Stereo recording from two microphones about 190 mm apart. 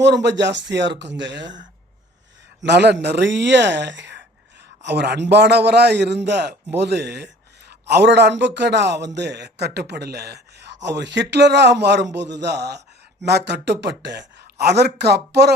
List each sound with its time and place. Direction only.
0.0 s a man's voice: 65° right (ahead or behind)